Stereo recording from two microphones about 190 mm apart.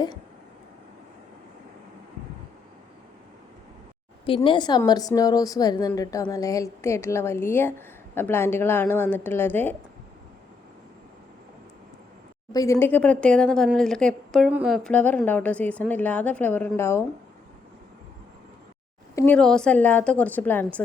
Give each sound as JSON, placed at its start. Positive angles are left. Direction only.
{"t": 4.4, "sound": "a woman's voice", "side_deg": 25}
{"t": 12.5, "sound": "speech", "side_deg": 20}
{"t": 19.1, "sound": "speech", "side_deg": 10}